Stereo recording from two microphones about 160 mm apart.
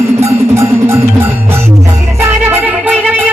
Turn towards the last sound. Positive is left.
turn(degrees=-10)  # may be behind; listen again after turning